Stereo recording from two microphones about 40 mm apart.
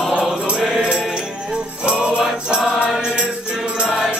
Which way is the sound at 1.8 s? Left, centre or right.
Right.